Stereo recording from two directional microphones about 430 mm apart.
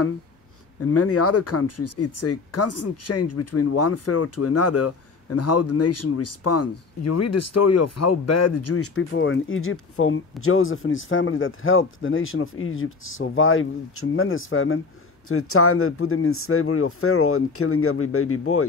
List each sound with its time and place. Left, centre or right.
0.8 s speech: left